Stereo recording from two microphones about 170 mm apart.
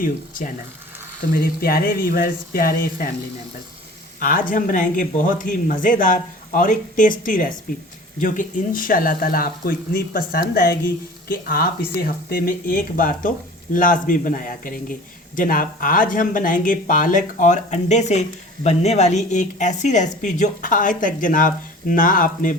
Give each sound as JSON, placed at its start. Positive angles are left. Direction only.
{"t": 0.0, "sound": "speech", "side_deg": 55}
{"t": 4.2, "sound": "speech", "side_deg": 55}